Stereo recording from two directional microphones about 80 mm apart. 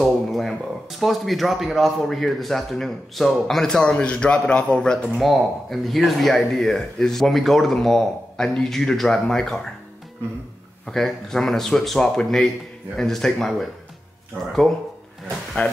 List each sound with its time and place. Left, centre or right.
0.0 s speech: centre
5.0 s speech: centre
10.9 s speech: centre
15.6 s speech: left